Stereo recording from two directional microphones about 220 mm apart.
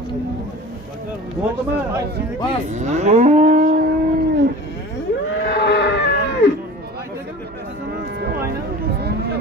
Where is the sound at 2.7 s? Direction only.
30° right (ahead or behind).